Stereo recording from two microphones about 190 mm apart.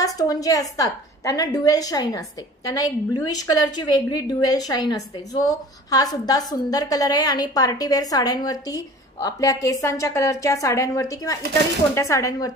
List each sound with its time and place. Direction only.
0.0 s a woman's voice: 20° left (ahead or behind)